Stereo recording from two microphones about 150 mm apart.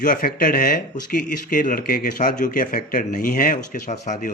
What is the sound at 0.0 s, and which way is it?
Speech, 65° left (ahead or behind).